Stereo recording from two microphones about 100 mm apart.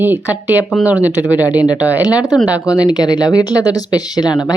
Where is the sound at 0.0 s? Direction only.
20° right (ahead or behind).